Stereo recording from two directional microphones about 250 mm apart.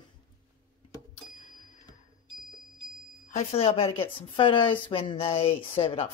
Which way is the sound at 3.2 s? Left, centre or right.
Left.